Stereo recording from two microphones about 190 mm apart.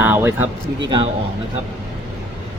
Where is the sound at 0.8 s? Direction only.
25° right (ahead or behind).